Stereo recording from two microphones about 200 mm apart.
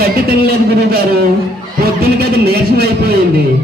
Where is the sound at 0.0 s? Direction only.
50° right (ahead or behind).